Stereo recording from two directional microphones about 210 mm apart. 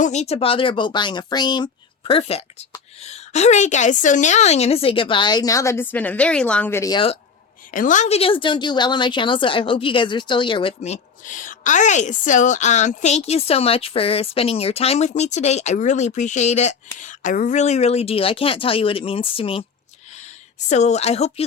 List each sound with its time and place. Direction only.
0.0 s a woman's voice: 30° left (ahead or behind)
7.7 s a woman's voice: 40° left (ahead or behind)
20.7 s speech: 35° left (ahead or behind)